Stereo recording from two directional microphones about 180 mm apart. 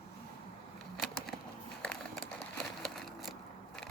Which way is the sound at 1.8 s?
5° left (ahead or behind).